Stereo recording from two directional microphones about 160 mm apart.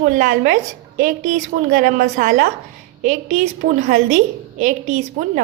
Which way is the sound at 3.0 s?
55° right (ahead or behind).